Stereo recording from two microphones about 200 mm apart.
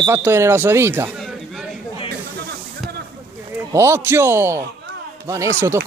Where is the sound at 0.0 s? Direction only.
10° right (ahead or behind).